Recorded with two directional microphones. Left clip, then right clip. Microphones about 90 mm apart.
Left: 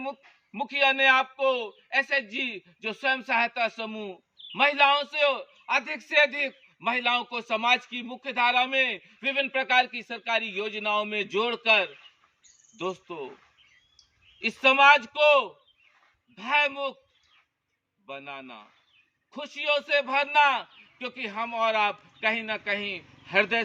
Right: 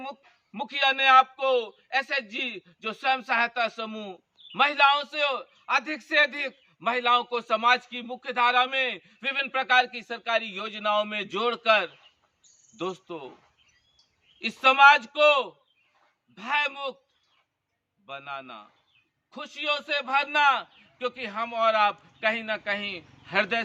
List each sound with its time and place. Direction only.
0.5 s a man's voice: 25° right (ahead or behind)
14.6 s a man's voice: 25° right (ahead or behind)
18.0 s a man's voice: 30° right (ahead or behind)